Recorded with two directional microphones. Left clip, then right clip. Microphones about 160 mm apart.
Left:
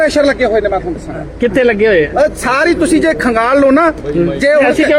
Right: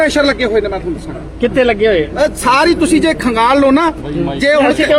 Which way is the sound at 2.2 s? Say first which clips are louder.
Right 1 dB; centre (ahead or behind).